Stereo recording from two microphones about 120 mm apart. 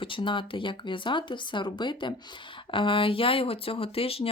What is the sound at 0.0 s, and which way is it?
Speech, 45° left (ahead or behind).